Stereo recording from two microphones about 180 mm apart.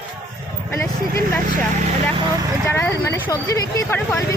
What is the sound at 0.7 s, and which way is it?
Speech, 15° left (ahead or behind).